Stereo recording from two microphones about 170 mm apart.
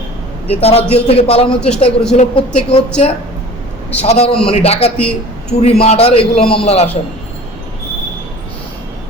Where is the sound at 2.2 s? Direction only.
35° left (ahead or behind).